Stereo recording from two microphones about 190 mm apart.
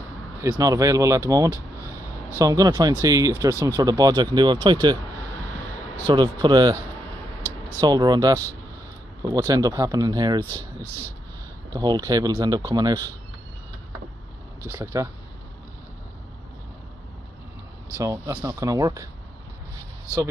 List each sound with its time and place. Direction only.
0.4 s speech: 15° right (ahead or behind)
6.0 s speech: 25° right (ahead or behind)
7.8 s speech: 20° right (ahead or behind)
11.7 s speech: 20° right (ahead or behind)
14.7 s speech: 15° right (ahead or behind)
17.9 s speech: 15° right (ahead or behind)